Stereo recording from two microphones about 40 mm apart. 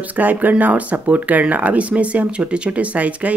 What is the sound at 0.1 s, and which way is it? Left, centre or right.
Speech, right.